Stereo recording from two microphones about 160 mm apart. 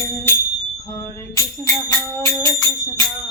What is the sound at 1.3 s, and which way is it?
Music, 20° left (ahead or behind).